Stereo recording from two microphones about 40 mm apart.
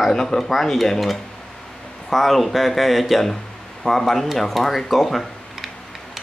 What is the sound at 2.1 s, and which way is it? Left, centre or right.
Speech, centre.